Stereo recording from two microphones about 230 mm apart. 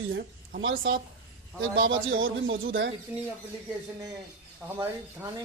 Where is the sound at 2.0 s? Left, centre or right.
Right.